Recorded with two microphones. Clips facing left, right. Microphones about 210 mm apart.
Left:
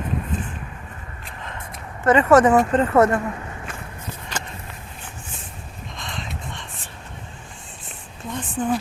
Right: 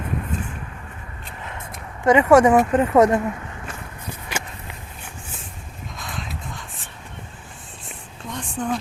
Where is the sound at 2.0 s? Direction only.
10° right (ahead or behind).